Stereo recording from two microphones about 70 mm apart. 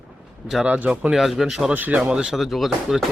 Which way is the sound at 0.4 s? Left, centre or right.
Centre.